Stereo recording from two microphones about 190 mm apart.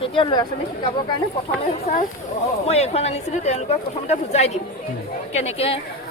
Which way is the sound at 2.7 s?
35° left (ahead or behind).